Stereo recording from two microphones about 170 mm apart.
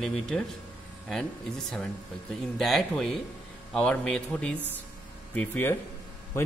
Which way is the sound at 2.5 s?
Centre (ahead or behind).